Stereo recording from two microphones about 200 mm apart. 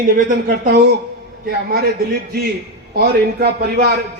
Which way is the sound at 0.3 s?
40° right (ahead or behind).